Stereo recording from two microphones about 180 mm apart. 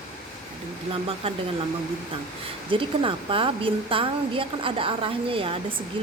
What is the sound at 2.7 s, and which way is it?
A woman's voice, 30° right (ahead or behind).